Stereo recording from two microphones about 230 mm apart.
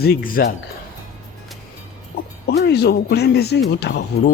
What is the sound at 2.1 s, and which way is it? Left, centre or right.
Music, left.